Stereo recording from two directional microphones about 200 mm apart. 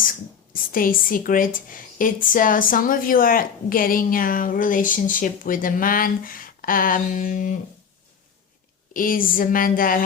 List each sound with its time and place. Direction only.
0.5 s a woman's voice: 45° left (ahead or behind)
8.9 s a woman's voice: 45° left (ahead or behind)